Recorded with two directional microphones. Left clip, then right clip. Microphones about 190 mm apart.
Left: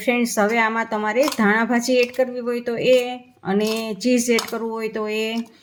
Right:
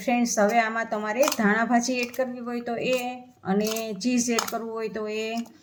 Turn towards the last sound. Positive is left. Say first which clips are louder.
# left 6 dB
turn(degrees=45)  # may be behind; listen again after turning